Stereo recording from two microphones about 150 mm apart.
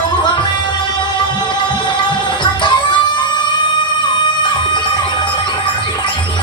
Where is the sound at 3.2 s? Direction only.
30° left (ahead or behind).